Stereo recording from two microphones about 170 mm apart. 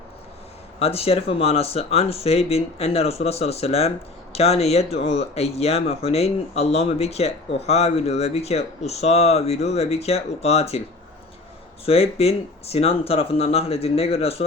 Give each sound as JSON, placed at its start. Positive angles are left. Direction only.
{"t": 0.8, "sound": "speech", "side_deg": 35}
{"t": 11.9, "sound": "speech", "side_deg": 35}